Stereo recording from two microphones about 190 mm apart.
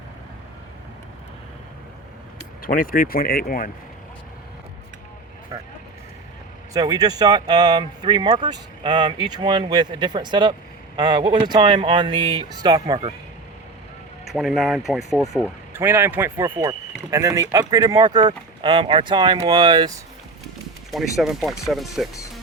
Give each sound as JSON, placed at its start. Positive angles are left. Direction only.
{"t": 2.6, "sound": "speech", "side_deg": 50}
{"t": 6.7, "sound": "speech", "side_deg": -20}
{"t": 14.3, "sound": "speech", "side_deg": 0}
{"t": 20.9, "sound": "speech", "side_deg": 0}